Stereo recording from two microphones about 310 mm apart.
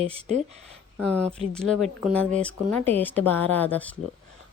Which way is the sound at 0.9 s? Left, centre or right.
Centre.